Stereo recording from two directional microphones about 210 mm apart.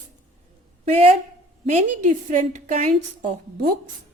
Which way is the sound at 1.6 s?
35° right (ahead or behind).